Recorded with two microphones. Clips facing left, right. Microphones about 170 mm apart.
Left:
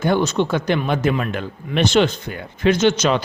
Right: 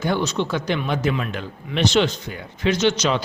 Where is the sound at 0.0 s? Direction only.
50° left (ahead or behind).